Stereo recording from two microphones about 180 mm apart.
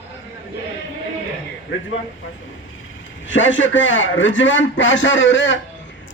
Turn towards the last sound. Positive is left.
turn(degrees=90)